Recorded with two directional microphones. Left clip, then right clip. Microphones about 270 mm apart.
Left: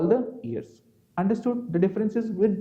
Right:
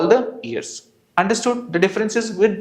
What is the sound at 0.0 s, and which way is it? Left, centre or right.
Speech, centre.